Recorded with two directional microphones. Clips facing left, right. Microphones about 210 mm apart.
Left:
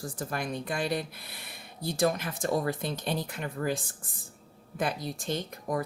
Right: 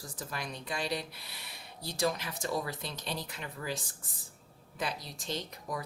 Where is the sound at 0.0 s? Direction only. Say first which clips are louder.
Left 7 dB; 50° left (ahead or behind).